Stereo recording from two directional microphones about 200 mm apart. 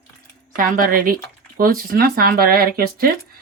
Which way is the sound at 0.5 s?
45° right (ahead or behind).